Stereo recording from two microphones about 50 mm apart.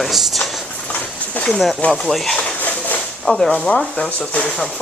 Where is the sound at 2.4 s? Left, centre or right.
Left.